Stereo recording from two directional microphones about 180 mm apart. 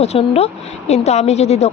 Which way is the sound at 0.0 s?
35° left (ahead or behind).